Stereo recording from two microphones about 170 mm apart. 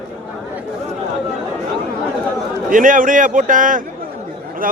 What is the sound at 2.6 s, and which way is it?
A man's voice, 50° right (ahead or behind).